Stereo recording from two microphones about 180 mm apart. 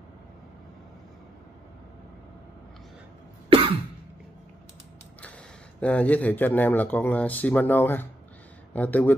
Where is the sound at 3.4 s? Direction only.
30° right (ahead or behind).